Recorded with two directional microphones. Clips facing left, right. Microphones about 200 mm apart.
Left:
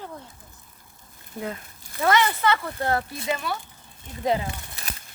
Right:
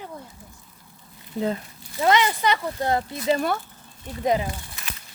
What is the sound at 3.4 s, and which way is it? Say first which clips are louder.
Speech: right 6 dB; 50° right (ahead or behind).